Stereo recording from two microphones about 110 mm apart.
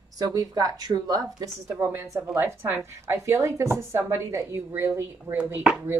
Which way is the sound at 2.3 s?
20° right (ahead or behind).